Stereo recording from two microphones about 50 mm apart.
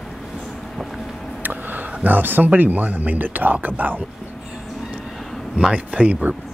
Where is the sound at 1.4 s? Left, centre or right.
Right.